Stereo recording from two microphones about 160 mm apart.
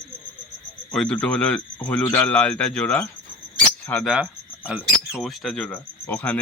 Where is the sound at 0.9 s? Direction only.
5° left (ahead or behind).